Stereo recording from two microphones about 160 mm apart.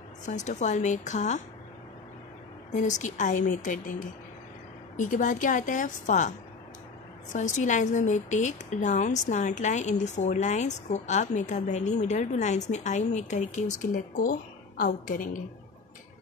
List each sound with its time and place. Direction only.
0.2 s a woman's voice: 50° left (ahead or behind)
2.7 s a woman's voice: 50° left (ahead or behind)
4.9 s a woman's voice: 55° left (ahead or behind)
7.3 s a woman's voice: 50° left (ahead or behind)